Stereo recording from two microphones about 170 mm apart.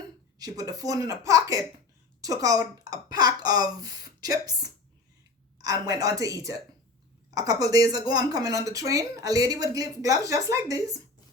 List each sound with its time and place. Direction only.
0.3 s speech: 20° right (ahead or behind)